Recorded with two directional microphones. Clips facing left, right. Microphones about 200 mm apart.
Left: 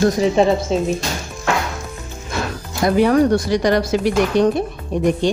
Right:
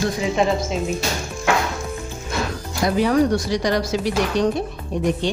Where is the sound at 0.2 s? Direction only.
35° left (ahead or behind).